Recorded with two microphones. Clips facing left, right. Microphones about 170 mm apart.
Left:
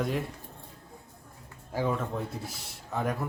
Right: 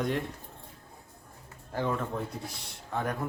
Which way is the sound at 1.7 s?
5° left (ahead or behind).